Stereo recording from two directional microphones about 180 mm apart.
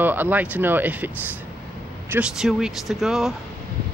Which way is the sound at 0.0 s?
10° right (ahead or behind).